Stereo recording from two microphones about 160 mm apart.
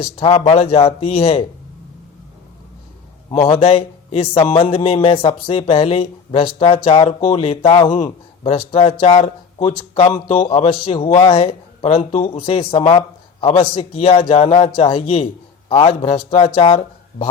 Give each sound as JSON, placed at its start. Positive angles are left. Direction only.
{"t": 0.0, "sound": "a man's voice", "side_deg": 35}
{"t": 3.3, "sound": "a man's voice", "side_deg": 35}